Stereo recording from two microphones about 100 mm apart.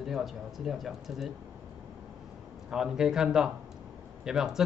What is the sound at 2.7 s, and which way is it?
Speech, 5° right (ahead or behind).